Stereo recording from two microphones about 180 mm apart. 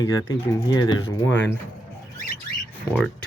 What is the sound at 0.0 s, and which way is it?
Speech, 25° left (ahead or behind).